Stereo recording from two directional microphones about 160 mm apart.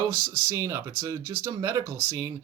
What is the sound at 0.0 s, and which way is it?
Speech, 20° right (ahead or behind).